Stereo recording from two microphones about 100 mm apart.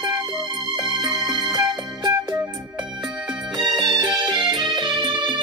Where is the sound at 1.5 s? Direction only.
45° right (ahead or behind).